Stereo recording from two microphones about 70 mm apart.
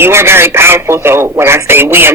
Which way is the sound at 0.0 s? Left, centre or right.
Right.